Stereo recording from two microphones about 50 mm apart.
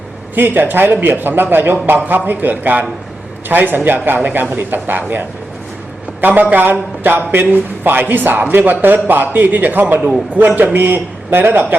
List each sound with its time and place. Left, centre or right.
0.3 s a man's voice: right
6.2 s a man's voice: right